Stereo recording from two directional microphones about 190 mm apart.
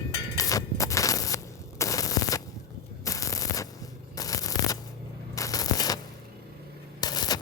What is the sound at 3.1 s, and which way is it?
Sanding, 15° left (ahead or behind).